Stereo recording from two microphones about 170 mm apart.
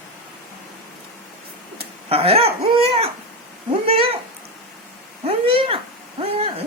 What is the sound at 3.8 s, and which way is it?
Speech, 35° right (ahead or behind).